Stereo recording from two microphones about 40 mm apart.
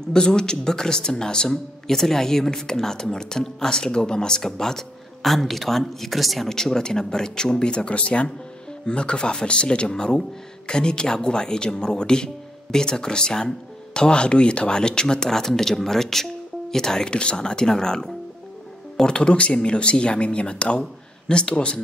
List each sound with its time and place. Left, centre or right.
0.0 s speech: centre
6.5 s speech: centre